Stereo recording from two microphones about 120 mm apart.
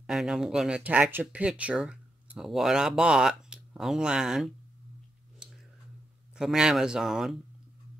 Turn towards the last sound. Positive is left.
turn(degrees=-5)  # may be behind; listen again after turning